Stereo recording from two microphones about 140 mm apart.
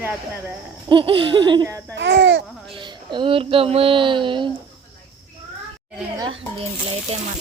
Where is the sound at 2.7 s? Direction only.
35° right (ahead or behind).